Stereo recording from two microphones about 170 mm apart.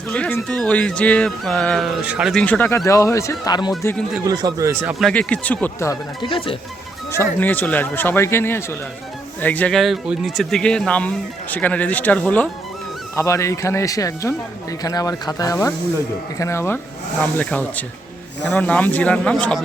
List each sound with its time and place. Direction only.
0.1 s speech: 10° left (ahead or behind); by 2.3 s 5° right (ahead or behind)
2.3 s speech: 10° left (ahead or behind)
4.2 s speech: 20° right (ahead or behind)
4.9 s speech: 5° left (ahead or behind)
6.2 s speech: 30° left (ahead or behind)
7.1 s speech: 15° left (ahead or behind)